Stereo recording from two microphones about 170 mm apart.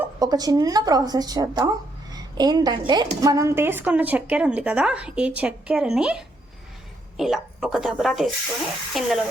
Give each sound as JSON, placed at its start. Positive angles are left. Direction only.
{"t": 0.2, "sound": "a woman's voice", "side_deg": -20}